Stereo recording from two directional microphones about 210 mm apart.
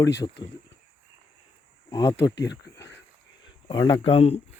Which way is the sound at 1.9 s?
15° left (ahead or behind).